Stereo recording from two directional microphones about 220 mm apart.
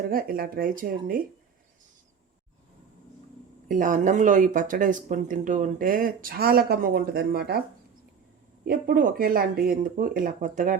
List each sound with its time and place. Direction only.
0.1 s speech: 40° right (ahead or behind)
3.7 s speech: 35° right (ahead or behind)
8.6 s speech: 40° right (ahead or behind)